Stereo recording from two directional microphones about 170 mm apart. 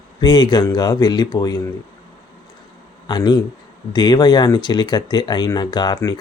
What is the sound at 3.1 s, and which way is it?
Speech, 25° left (ahead or behind).